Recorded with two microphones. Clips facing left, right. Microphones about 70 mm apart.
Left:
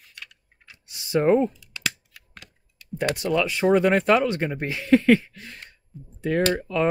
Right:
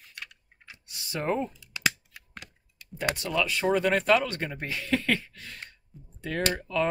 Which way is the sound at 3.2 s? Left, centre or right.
Left.